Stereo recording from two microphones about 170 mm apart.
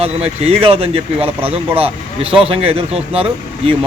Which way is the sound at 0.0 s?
35° right (ahead or behind).